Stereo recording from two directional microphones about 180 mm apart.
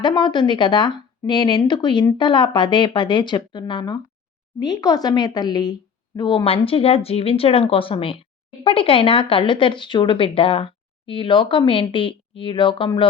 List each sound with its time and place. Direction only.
0.0 s speech: 25° left (ahead or behind)